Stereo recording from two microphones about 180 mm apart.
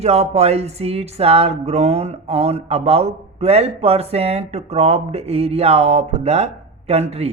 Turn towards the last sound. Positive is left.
turn(degrees=-35)  # may be behind; listen again after turning